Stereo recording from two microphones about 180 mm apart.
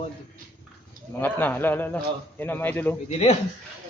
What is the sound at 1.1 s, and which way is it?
A man's voice, 10° left (ahead or behind).